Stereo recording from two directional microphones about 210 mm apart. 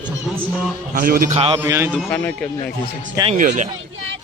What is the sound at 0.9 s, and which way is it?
Speech, 45° right (ahead or behind).